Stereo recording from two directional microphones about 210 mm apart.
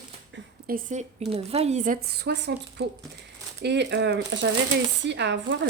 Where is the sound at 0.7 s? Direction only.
35° right (ahead or behind).